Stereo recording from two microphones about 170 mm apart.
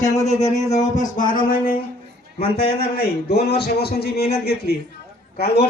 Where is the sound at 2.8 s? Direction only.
70° left (ahead or behind).